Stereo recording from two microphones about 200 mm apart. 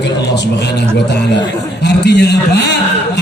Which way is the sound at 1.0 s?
60° left (ahead or behind).